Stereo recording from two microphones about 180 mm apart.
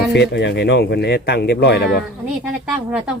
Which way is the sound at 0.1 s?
75° left (ahead or behind).